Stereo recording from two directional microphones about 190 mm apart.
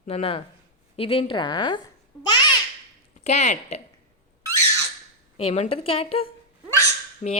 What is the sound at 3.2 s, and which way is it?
Speech, 35° left (ahead or behind).